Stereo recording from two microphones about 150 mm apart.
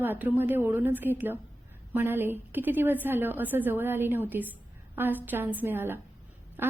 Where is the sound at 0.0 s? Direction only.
10° right (ahead or behind).